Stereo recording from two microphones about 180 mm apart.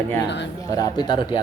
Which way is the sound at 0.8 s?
25° left (ahead or behind).